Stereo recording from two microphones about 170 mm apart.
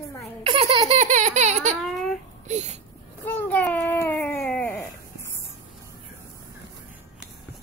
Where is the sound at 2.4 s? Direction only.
40° right (ahead or behind).